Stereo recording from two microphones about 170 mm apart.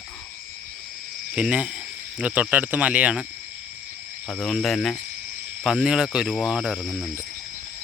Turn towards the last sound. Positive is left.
turn(degrees=0)  # may be behind; listen again after turning